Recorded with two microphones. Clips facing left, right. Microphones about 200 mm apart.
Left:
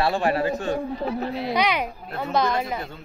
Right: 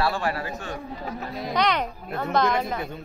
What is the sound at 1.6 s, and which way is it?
Speech, 5° left (ahead or behind).